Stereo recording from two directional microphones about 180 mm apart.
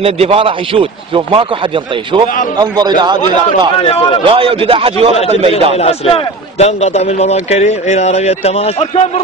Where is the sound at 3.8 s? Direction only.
30° left (ahead or behind).